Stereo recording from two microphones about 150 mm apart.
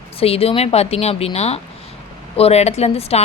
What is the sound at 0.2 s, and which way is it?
Speech, 40° left (ahead or behind).